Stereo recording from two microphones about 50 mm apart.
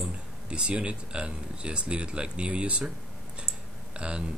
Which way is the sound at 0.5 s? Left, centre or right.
Right.